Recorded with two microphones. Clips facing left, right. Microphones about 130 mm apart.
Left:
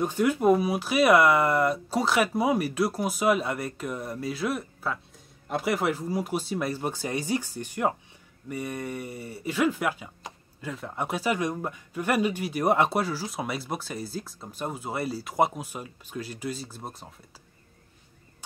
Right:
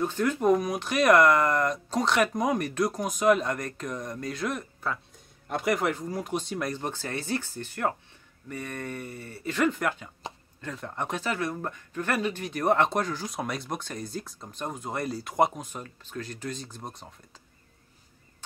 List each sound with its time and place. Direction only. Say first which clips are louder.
0.0 s speech: left 2 dB; 10° left (ahead or behind)